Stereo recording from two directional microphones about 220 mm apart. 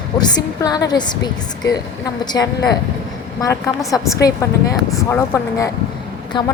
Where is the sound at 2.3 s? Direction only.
15° left (ahead or behind).